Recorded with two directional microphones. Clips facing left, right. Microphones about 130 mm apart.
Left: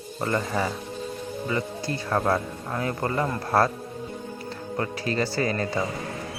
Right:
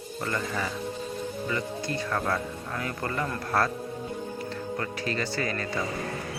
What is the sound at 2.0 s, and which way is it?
A man's voice, 35° left (ahead or behind).